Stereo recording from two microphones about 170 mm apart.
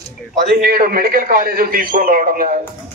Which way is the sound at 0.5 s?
60° right (ahead or behind).